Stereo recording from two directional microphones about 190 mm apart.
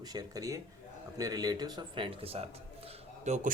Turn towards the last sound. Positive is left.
turn(degrees=-40)  # may be behind; listen again after turning